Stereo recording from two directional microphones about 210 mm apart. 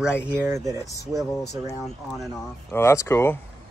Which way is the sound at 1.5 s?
Centre (ahead or behind).